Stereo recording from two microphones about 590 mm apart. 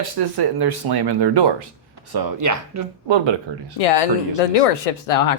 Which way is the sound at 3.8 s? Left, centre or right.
Left.